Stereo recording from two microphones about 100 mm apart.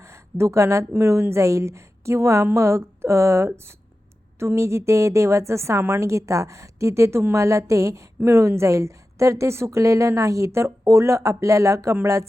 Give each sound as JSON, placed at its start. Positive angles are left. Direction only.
{"t": 0.0, "sound": "a woman's voice", "side_deg": -30}